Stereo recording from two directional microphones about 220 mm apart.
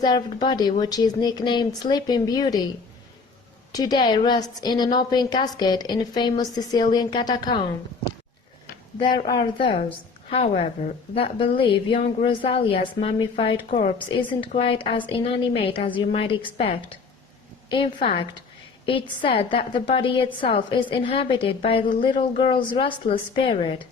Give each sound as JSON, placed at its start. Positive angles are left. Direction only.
{"t": 0.0, "sound": "a woman's voice", "side_deg": 20}
{"t": 3.7, "sound": "a woman's voice", "side_deg": 15}
{"t": 9.0, "sound": "a woman's voice", "side_deg": 20}